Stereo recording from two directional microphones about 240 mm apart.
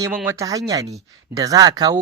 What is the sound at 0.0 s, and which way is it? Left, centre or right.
Speech, centre.